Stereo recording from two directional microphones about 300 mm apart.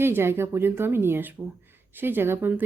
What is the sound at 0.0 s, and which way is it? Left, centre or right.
Speech, centre.